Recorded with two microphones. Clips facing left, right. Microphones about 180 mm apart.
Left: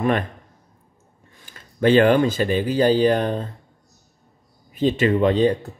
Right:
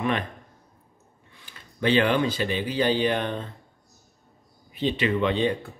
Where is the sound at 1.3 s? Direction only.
45° left (ahead or behind).